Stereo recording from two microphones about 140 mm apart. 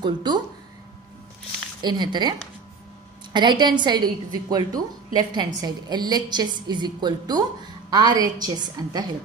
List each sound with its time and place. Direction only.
0.0 s a woman's voice: 30° right (ahead or behind)
1.8 s a woman's voice: 30° right (ahead or behind)
3.3 s a woman's voice: 30° right (ahead or behind)